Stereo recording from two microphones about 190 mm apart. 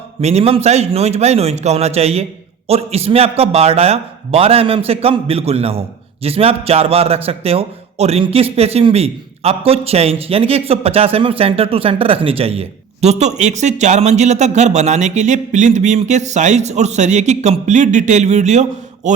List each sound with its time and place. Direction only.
0.2 s a man's voice: 35° right (ahead or behind)